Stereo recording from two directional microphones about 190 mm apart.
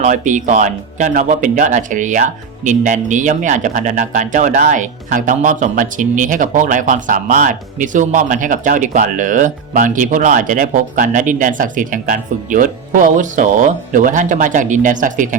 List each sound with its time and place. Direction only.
0.0 s speech: 40° right (ahead or behind)